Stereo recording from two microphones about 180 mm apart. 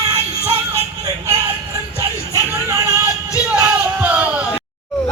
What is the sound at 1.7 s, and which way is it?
Music, 20° right (ahead or behind).